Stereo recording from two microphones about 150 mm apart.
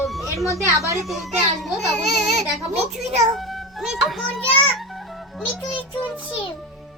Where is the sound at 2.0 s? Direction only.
50° right (ahead or behind).